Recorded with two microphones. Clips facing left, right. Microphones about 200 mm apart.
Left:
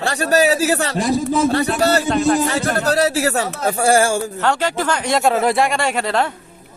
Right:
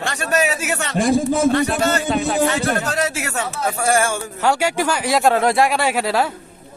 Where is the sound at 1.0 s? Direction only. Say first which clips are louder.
Right 4 dB; 50° right (ahead or behind).